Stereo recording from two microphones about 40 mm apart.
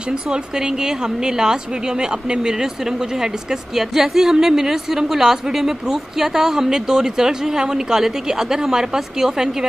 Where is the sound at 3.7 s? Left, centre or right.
Centre.